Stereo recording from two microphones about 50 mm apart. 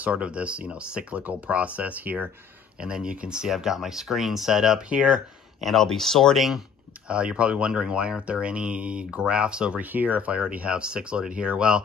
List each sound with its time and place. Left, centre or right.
0.0 s speech: right
2.8 s speech: centre
4.7 s speech: right
5.6 s speech: centre
7.1 s speech: right
9.8 s speech: right